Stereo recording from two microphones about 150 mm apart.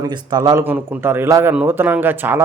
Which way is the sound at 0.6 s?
15° right (ahead or behind).